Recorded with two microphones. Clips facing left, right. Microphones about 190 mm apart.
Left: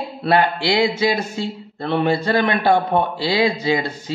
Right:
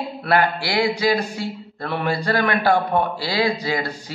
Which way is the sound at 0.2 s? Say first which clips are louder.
Left 3 dB; 25° left (ahead or behind).